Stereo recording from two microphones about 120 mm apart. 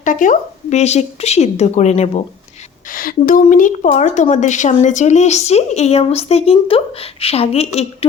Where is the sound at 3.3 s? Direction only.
90° left.